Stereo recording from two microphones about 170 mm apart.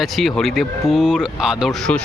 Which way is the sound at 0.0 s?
Centre (ahead or behind).